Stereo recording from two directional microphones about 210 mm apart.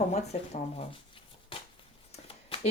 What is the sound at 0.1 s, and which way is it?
Speech, 30° left (ahead or behind).